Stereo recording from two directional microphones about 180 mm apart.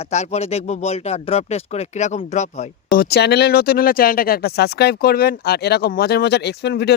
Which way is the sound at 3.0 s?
65° left (ahead or behind).